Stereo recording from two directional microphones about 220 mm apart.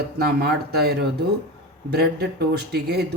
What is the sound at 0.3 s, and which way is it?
Speech, 45° right (ahead or behind).